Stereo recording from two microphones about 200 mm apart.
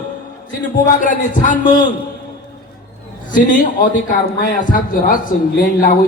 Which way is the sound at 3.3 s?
40° left (ahead or behind).